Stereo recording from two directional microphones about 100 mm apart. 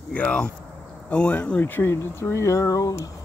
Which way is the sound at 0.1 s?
10° left (ahead or behind).